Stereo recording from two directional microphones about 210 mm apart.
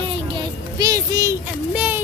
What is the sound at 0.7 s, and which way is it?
Speech, 20° right (ahead or behind).